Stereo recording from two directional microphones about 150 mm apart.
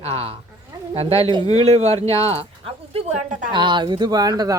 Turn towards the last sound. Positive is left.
turn(degrees=-25)  # may be behind; listen again after turning